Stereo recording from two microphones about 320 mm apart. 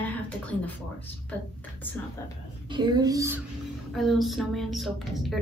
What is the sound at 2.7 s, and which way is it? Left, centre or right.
A child's voice, centre.